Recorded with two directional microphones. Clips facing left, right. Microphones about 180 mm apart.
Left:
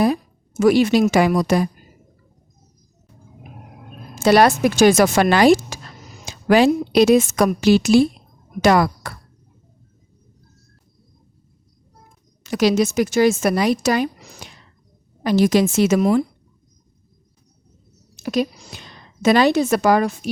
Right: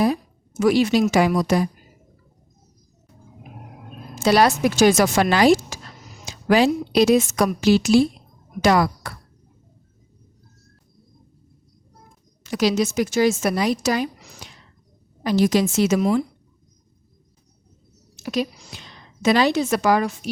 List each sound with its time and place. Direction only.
0.6 s a woman's voice: 55° left (ahead or behind)
4.2 s a woman's voice: 55° left (ahead or behind)
12.4 s a woman's voice: 60° left (ahead or behind)
18.2 s a woman's voice: 50° left (ahead or behind)